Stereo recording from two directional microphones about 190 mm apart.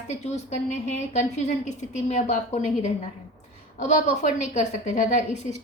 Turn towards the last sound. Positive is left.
turn(degrees=40)  # may be behind; listen again after turning